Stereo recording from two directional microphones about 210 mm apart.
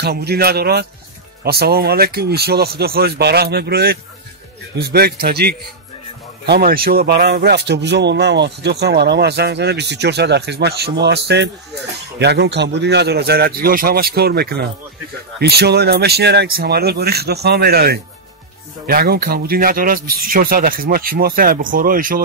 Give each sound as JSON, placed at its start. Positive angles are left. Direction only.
{"t": 0.0, "sound": "speech", "side_deg": -50}